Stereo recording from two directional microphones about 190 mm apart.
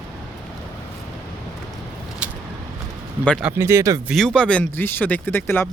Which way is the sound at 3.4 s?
10° right (ahead or behind).